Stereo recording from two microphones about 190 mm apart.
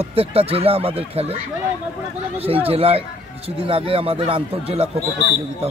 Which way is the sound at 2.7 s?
30° right (ahead or behind).